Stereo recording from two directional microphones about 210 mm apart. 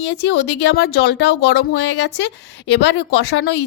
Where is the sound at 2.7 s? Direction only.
55° left (ahead or behind).